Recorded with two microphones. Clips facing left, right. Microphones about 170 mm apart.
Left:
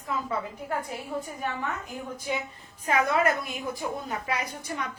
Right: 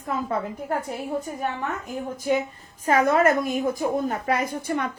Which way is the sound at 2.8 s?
45° right (ahead or behind).